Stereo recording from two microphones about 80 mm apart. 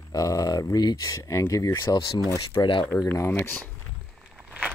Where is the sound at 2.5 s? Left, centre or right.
Left.